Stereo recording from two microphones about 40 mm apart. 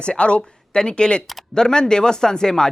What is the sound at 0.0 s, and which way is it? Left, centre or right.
Speech, left.